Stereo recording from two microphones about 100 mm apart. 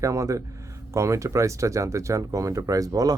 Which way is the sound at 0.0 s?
30° right (ahead or behind).